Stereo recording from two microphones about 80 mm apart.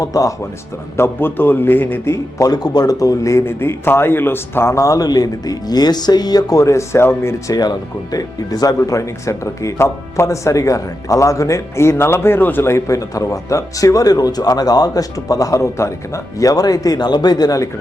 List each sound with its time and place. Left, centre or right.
0.0 s speech: left
0.9 s a man's voice: left
2.4 s speech: left
7.5 s speech: left